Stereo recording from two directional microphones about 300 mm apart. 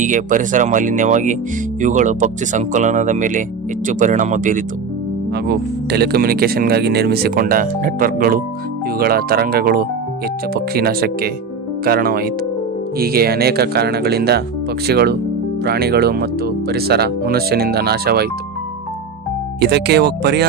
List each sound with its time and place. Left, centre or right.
0.0 s speech: right
19.5 s speech: right